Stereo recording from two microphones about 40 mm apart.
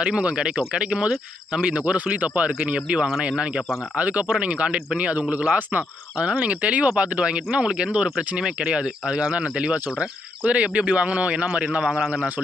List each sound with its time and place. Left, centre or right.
0.0 s speech: right
4.0 s speech: right
11.8 s speech: centre